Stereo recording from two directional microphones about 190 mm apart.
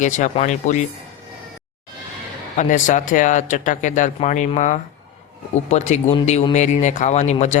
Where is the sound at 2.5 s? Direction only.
40° left (ahead or behind).